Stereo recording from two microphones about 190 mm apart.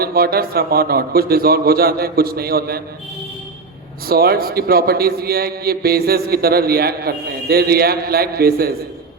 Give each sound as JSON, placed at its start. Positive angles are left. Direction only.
{"t": 0.0, "sound": "a man's voice", "side_deg": -55}
{"t": 4.0, "sound": "a man's voice", "side_deg": -55}